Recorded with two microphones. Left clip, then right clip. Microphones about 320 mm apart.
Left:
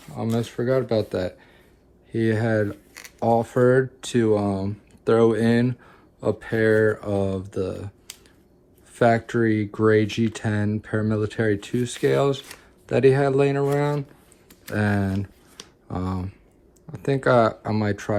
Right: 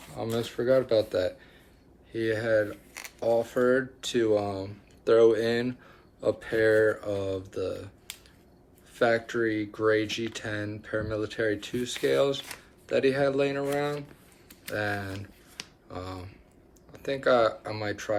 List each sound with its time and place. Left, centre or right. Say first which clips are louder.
0.2 s speech: left 4 dB; centre
9.0 s speech: left 5 dB; centre
16.9 s speech: left 5 dB; centre